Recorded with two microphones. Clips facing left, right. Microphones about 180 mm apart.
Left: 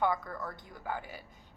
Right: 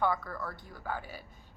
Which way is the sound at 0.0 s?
20° left (ahead or behind).